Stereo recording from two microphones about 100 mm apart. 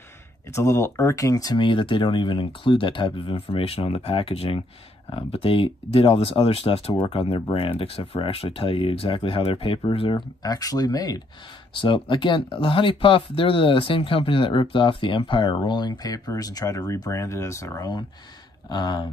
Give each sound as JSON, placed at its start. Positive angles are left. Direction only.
{"t": 0.5, "sound": "speech", "side_deg": 30}
{"t": 1.6, "sound": "speech", "side_deg": 55}
{"t": 3.3, "sound": "speech", "side_deg": 90}
{"t": 10.4, "sound": "speech", "side_deg": 40}
{"t": 11.8, "sound": "speech", "side_deg": 55}